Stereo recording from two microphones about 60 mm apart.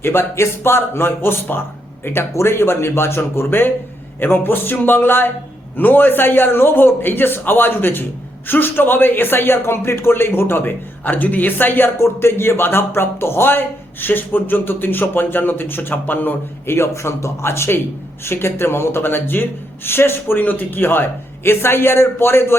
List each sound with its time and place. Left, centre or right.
0.0 s speech: left
11.9 s speech: left